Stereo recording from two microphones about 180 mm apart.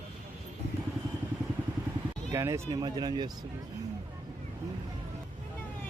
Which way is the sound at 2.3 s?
15° right (ahead or behind).